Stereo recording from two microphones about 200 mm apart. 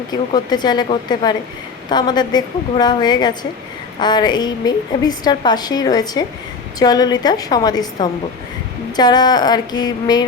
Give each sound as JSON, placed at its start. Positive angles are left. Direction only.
{"t": 0.1, "sound": "a woman's voice", "side_deg": 20}